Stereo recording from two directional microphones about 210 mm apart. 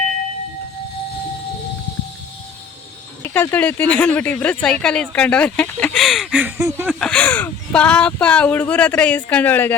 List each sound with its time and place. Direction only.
3.2 s speech: 10° left (ahead or behind); by 6.9 s 10° right (ahead or behind)
7.0 s speech: 5° left (ahead or behind)